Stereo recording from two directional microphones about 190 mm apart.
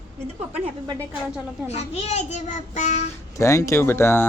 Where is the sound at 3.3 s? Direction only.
15° left (ahead or behind).